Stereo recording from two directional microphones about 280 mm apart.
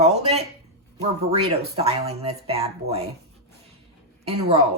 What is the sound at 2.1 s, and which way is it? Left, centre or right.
Speech, right.